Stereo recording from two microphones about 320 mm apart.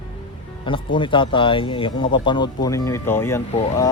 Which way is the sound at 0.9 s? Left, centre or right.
Centre.